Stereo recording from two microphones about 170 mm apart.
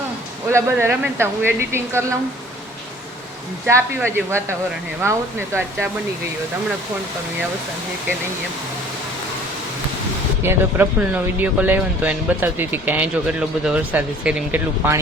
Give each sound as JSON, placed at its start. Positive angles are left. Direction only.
{"t": 0.5, "sound": "speech", "side_deg": -15}
{"t": 3.7, "sound": "speech", "side_deg": -15}
{"t": 10.4, "sound": "speech", "side_deg": -15}